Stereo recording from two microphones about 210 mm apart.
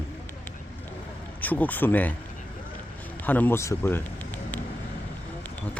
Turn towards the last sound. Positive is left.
turn(degrees=5)  # may be behind; listen again after turning